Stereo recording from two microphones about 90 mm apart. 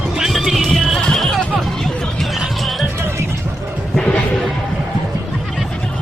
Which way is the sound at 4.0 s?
10° left (ahead or behind).